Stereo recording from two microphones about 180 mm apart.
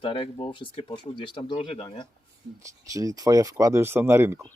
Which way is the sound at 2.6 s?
20° right (ahead or behind).